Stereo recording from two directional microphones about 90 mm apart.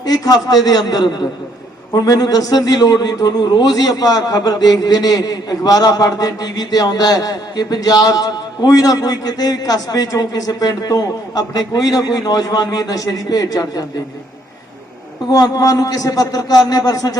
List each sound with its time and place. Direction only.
0.0 s a man's voice: 45° left (ahead or behind)
15.3 s a man's voice: 40° left (ahead or behind)